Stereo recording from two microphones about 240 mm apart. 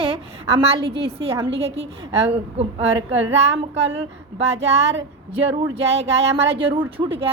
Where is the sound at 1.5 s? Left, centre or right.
Right.